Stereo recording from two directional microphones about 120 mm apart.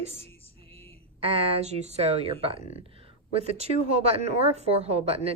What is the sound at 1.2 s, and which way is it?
Speech, 55° right (ahead or behind).